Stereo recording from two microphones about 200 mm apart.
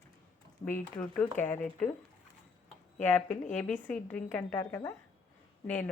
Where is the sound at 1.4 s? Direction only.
10° left (ahead or behind).